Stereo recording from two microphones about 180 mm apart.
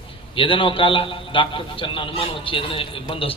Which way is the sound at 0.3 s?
30° left (ahead or behind).